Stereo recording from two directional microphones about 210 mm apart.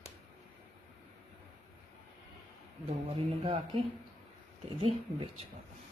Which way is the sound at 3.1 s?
25° right (ahead or behind).